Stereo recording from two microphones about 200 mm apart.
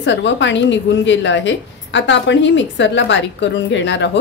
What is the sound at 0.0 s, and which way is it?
A woman's voice, 65° left (ahead or behind).